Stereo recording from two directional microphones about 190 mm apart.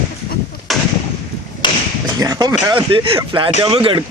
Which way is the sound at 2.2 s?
20° right (ahead or behind).